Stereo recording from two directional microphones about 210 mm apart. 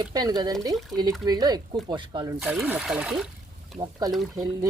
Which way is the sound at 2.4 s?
5° right (ahead or behind).